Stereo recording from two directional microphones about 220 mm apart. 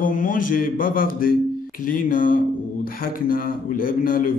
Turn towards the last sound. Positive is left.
turn(degrees=40)  # may be behind; listen again after turning